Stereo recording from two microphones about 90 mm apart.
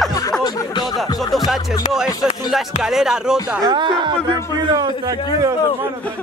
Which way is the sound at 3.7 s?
60° right (ahead or behind).